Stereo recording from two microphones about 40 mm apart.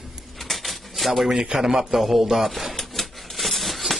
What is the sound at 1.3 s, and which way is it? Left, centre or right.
Speech, centre.